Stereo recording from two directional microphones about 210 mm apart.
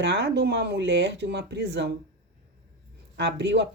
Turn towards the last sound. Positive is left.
turn(degrees=-55)  # may be behind; listen again after turning